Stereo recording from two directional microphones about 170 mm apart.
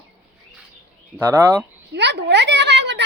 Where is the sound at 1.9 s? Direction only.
90° right.